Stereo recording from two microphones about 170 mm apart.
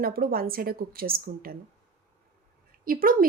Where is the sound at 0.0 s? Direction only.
60° right (ahead or behind).